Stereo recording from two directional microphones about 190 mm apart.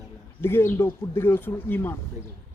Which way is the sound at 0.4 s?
10° left (ahead or behind).